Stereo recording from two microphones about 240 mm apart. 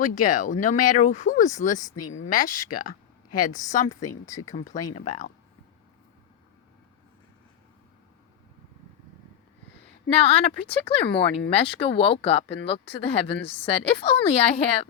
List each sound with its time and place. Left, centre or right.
0.0 s speech: left
3.8 s speech: centre
4.9 s speech: left
10.1 s speech: left